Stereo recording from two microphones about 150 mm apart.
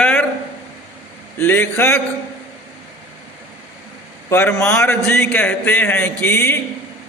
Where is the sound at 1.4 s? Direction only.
15° left (ahead or behind).